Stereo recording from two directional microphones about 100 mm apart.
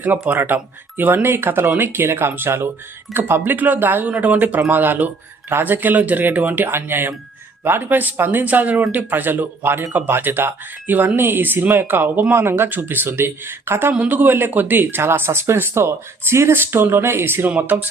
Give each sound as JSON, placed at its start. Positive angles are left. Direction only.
{"t": 0.0, "sound": "speech", "side_deg": -20}